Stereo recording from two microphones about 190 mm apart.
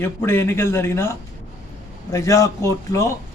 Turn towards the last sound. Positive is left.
turn(degrees=15)  # may be behind; listen again after turning